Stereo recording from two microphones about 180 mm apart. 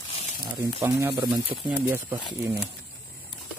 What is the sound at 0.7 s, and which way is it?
Speech, 15° right (ahead or behind).